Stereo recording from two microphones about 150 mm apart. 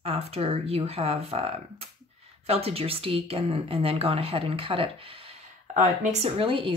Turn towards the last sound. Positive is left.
turn(degrees=-35)  # may be behind; listen again after turning